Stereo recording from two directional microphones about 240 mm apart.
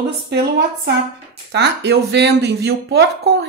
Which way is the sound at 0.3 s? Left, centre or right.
Right.